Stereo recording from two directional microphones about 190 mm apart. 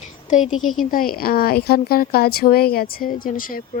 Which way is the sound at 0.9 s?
50° left (ahead or behind).